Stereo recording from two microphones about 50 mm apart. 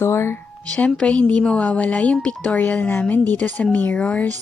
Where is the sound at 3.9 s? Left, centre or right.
Left.